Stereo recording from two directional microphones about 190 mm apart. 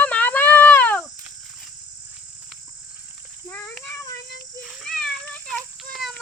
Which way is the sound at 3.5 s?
10° left (ahead or behind).